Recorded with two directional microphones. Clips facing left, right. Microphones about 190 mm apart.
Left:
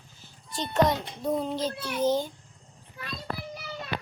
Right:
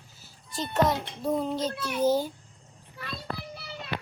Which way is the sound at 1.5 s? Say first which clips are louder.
Even; 30° left (ahead or behind).